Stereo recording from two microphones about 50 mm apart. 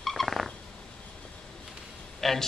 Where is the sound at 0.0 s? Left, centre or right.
Centre.